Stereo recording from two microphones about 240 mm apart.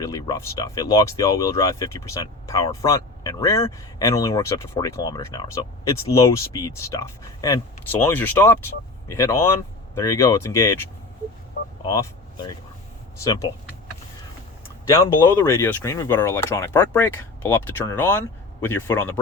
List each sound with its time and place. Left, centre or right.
0.0 s speech: centre
11.9 s speech: centre
14.9 s speech: centre